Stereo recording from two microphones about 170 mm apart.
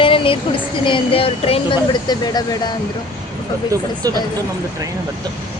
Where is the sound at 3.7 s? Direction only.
20° right (ahead or behind).